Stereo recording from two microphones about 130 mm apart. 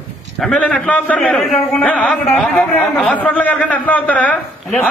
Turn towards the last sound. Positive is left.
turn(degrees=10)  # may be behind; listen again after turning